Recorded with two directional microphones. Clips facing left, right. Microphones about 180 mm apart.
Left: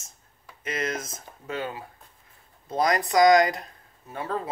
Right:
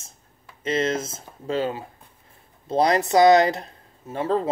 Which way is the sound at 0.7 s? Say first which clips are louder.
Right 7 dB; 25° right (ahead or behind).